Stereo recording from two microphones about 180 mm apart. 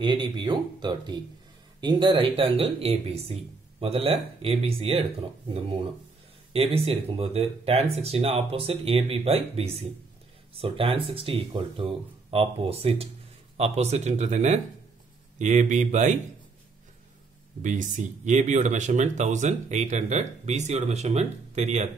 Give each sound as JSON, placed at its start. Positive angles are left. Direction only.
{"t": 0.0, "sound": "speech", "side_deg": -25}
{"t": 17.6, "sound": "speech", "side_deg": -45}